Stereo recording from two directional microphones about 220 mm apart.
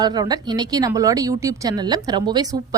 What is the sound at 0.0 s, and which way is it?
Speech, 20° right (ahead or behind).